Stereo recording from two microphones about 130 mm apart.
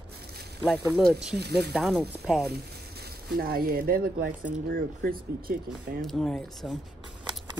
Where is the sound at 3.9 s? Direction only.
90° right.